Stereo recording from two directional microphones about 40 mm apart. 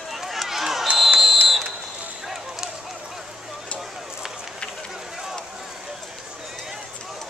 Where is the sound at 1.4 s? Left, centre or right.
Centre.